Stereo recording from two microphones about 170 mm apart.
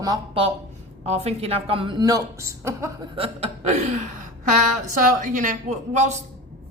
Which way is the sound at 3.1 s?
35° right (ahead or behind).